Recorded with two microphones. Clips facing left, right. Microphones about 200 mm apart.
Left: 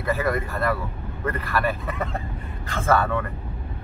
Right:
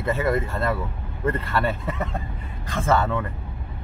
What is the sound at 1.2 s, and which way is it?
Speech, 25° right (ahead or behind).